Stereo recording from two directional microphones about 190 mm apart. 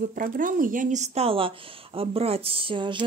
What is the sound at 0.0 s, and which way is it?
Speech, 45° right (ahead or behind).